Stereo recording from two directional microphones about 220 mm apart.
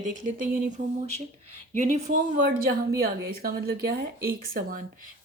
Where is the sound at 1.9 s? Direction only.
35° right (ahead or behind).